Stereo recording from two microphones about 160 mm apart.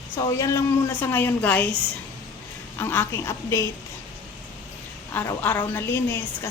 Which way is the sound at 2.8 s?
15° left (ahead or behind).